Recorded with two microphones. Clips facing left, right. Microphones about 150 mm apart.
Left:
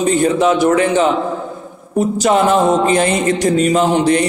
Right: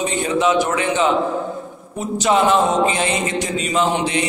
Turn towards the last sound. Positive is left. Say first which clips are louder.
# left 6 dB
turn(degrees=40)  # may be behind; listen again after turning